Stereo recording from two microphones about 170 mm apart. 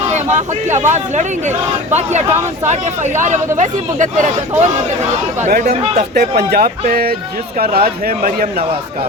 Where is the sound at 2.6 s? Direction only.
45° right (ahead or behind).